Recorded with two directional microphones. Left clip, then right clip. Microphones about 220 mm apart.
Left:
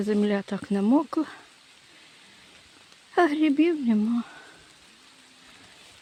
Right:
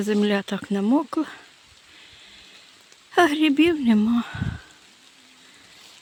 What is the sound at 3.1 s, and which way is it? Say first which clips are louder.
Speech: right 3 dB; 5° right (ahead or behind).